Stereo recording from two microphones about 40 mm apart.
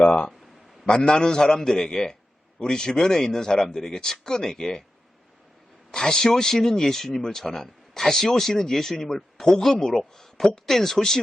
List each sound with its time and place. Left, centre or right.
0.0 s a man's voice: left
5.9 s speech: centre